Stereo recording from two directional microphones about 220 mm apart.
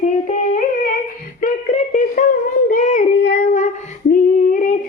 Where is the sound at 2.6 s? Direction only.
35° left (ahead or behind).